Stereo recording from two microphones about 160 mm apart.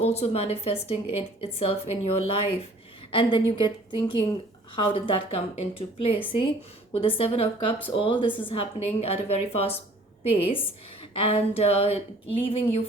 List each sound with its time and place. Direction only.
0.0 s a woman's voice: 40° left (ahead or behind)